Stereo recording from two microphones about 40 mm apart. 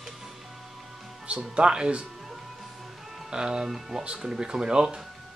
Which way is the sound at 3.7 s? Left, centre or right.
Centre.